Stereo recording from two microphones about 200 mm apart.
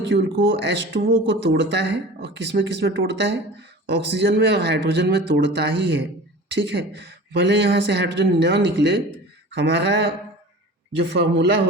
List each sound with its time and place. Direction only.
0.1 s speech: 65° right (ahead or behind)